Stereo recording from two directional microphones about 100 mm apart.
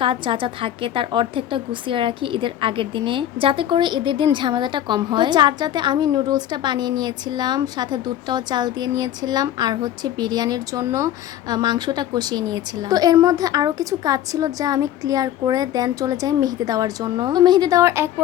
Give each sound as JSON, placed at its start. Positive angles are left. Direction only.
{"t": 0.0, "sound": "a woman's voice", "side_deg": -60}